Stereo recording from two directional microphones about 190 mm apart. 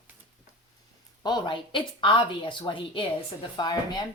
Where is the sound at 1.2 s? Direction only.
25° left (ahead or behind).